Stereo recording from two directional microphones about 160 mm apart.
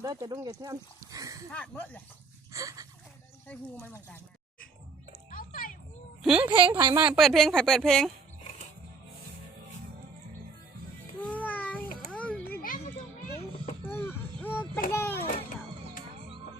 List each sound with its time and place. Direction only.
0.0 s speech: 25° right (ahead or behind)
1.5 s speech: 10° left (ahead or behind)
2.5 s a sound: 20° right (ahead or behind)
3.8 s speech: 10° left (ahead or behind)
5.3 s music: 60° left (ahead or behind)
6.2 s speech: 5° right (ahead or behind)
6.5 s speech: 30° right (ahead or behind)
7.1 s speech: centre (ahead or behind)
11.2 s music: 10° left (ahead or behind)
12.1 s a sound: 10° left (ahead or behind)
12.6 s children playing: 60° left (ahead or behind)
13.8 s a sound: 15° left (ahead or behind)
16.1 s music: 40° right (ahead or behind)